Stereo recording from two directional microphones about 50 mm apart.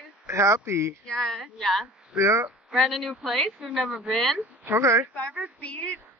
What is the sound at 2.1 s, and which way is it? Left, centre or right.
Speech, right.